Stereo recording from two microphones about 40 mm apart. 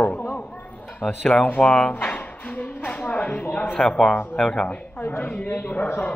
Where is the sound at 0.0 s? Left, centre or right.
Left.